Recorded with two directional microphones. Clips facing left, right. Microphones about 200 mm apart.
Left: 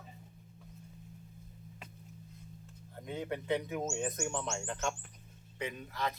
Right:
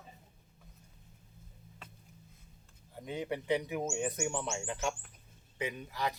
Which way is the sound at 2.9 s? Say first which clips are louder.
Right 1 dB; 15° right (ahead or behind).